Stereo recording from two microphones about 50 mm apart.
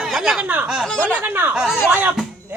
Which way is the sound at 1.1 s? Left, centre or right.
Right.